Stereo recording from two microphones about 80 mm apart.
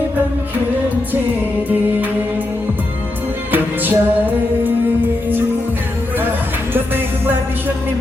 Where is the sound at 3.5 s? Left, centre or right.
Right.